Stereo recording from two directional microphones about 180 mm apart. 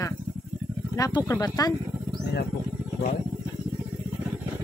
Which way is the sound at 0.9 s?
20° left (ahead or behind).